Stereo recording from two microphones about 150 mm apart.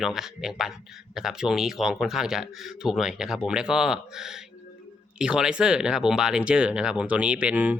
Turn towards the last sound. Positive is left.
turn(degrees=-10)  # may be behind; listen again after turning